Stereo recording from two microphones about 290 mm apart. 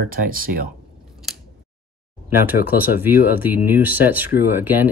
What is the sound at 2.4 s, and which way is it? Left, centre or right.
Speech, centre.